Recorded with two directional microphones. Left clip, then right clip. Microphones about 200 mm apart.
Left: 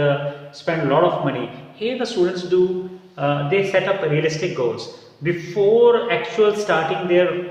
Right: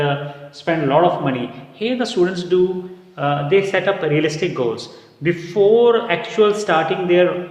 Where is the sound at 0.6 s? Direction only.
50° right (ahead or behind).